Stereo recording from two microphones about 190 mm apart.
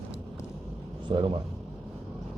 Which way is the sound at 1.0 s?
25° right (ahead or behind).